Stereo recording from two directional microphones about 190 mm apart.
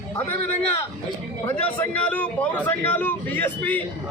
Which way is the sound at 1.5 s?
10° left (ahead or behind).